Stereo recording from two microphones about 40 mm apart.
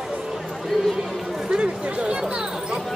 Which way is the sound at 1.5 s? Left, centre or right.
Right.